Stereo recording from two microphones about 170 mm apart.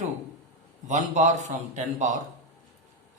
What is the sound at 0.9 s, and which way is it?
Speech, 45° right (ahead or behind).